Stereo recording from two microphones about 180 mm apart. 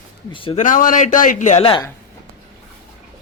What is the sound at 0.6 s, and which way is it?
A man's voice, 45° left (ahead or behind).